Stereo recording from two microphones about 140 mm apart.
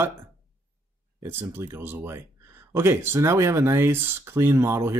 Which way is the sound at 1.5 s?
15° right (ahead or behind).